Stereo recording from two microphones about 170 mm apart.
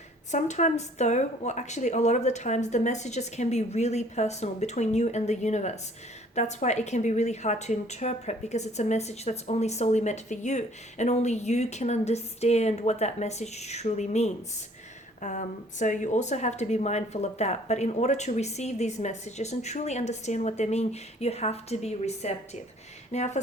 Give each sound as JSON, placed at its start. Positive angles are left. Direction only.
{"t": 0.3, "sound": "a woman's voice", "side_deg": 45}